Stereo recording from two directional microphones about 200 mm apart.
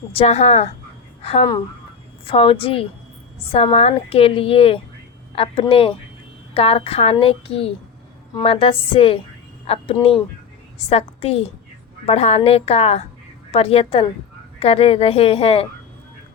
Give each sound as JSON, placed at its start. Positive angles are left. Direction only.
{"t": 0.1, "sound": "a woman's voice", "side_deg": 30}